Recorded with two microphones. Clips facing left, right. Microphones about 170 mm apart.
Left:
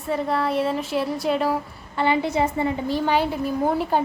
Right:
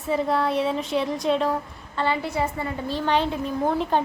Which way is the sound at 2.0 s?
20° left (ahead or behind).